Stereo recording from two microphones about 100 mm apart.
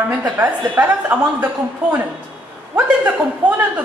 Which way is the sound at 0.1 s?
15° right (ahead or behind).